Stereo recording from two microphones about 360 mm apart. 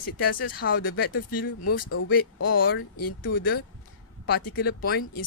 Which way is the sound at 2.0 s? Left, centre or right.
Left.